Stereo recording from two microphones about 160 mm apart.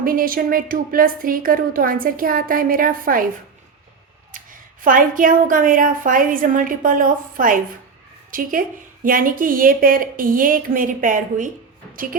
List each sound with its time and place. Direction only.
0.0 s a woman's voice: 60° right (ahead or behind)
4.3 s a woman's voice: 55° right (ahead or behind)